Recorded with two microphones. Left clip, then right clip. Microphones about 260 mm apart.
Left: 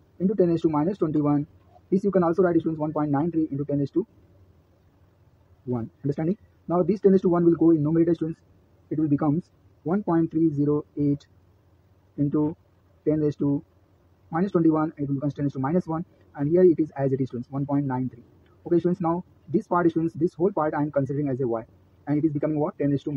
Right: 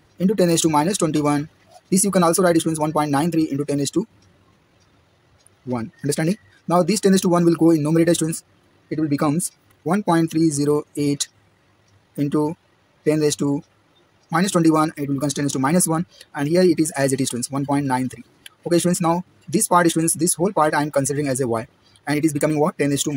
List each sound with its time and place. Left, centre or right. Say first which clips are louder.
0.2 s speech: right 4 dB; right
1.9 s speech: right 4 dB; right
2.5 s speech: right 4 dB; right
2.8 s speech: right 6 dB; right
5.7 s speech: right 5 dB; right
10.6 s speech: right 5 dB; right
12.3 s speech: right 5 dB; right
15.7 s speech: right 6 dB; right
17.1 s speech: right 5 dB; right
19.5 s speech: right 6 dB; right